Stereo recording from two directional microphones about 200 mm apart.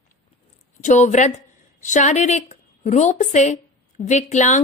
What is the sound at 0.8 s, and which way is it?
A woman's voice, 35° left (ahead or behind).